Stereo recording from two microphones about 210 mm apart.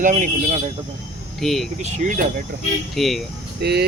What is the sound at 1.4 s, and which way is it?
Speech, centre (ahead or behind).